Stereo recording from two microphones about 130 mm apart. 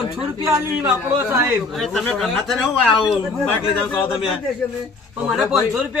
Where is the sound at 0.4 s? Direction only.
20° right (ahead or behind).